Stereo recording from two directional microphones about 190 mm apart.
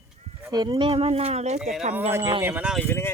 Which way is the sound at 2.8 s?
10° left (ahead or behind).